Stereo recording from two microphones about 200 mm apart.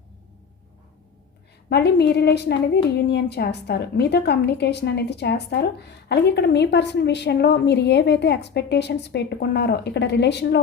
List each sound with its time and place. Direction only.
1.7 s a woman's voice: 55° left (ahead or behind)